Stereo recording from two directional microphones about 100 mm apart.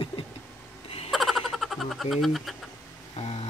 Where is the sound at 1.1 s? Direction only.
Centre (ahead or behind).